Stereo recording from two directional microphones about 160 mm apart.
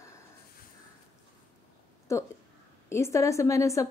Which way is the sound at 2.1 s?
20° left (ahead or behind).